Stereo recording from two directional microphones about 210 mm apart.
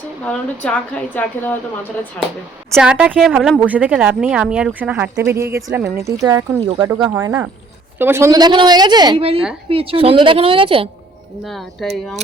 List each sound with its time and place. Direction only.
0.3 s a woman's voice: 5° left (ahead or behind)
2.7 s a woman's voice: 5° right (ahead or behind); by 10.8 s 25° right (ahead or behind)
11.4 s speech: centre (ahead or behind)